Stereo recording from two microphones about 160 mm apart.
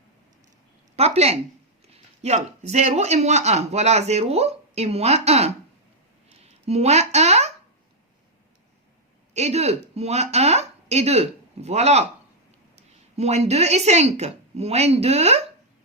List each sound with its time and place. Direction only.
0.9 s speech: 40° right (ahead or behind)
9.3 s a woman's voice: 45° right (ahead or behind)